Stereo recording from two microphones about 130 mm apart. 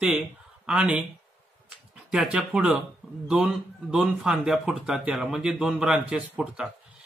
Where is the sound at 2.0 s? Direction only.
10° right (ahead or behind).